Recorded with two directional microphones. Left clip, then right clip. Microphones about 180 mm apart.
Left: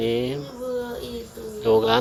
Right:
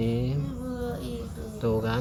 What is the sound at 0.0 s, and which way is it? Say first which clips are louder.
Insect: left 7 dB; 40° left (ahead or behind).